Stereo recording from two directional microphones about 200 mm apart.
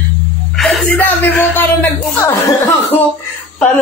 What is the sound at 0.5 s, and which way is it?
Speech, centre (ahead or behind).